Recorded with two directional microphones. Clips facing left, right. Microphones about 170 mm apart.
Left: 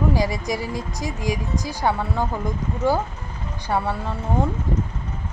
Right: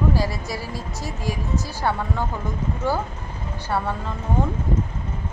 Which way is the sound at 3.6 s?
15° left (ahead or behind).